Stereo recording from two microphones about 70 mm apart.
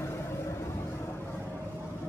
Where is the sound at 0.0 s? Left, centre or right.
Left.